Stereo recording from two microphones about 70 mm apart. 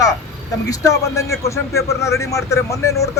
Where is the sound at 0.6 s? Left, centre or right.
Left.